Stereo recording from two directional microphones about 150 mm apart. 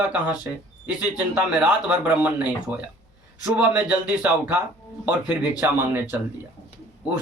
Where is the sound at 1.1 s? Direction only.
10° right (ahead or behind).